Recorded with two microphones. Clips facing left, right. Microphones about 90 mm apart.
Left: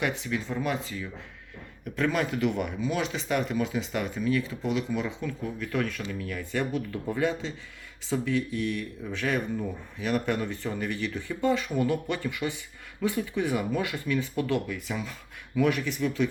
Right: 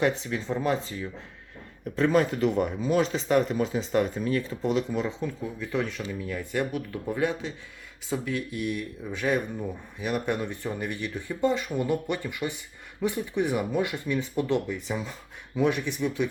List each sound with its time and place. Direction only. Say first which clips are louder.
0.0 s speech: right 3 dB; 30° right (ahead or behind)
5.5 s speech: right 1 dB; 20° right (ahead or behind)